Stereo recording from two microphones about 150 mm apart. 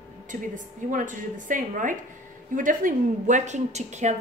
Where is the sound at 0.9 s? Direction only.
60° right (ahead or behind).